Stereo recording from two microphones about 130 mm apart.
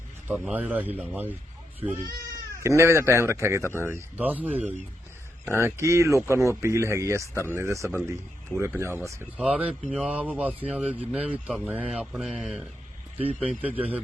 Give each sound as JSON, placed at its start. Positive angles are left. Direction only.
{"t": 0.3, "sound": "a man's voice", "side_deg": -10}
{"t": 2.6, "sound": "a man's voice", "side_deg": -20}
{"t": 10.1, "sound": "a man's voice", "side_deg": -10}